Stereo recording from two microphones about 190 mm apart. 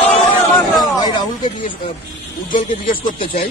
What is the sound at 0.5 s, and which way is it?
Speech, centre (ahead or behind).